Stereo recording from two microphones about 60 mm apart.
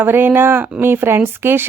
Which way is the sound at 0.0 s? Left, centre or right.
Right.